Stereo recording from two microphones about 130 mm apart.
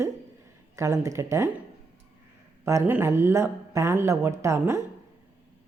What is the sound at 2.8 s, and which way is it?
A woman's voice, 15° right (ahead or behind).